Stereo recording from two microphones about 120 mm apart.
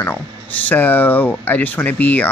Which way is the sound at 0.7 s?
15° left (ahead or behind).